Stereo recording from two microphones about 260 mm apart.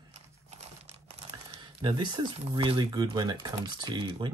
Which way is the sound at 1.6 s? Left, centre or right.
Centre.